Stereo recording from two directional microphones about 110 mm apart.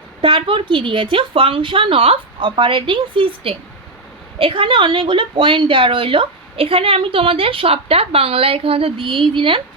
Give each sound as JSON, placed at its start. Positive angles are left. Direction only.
{"t": 0.2, "sound": "a woman's voice", "side_deg": -50}